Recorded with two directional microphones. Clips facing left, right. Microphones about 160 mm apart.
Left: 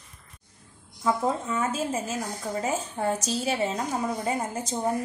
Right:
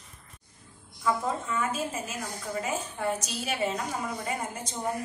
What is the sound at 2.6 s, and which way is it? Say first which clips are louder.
Speech: left 4 dB; 35° left (ahead or behind).